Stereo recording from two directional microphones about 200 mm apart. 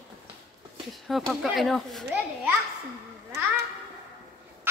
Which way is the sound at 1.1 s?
Centre (ahead or behind).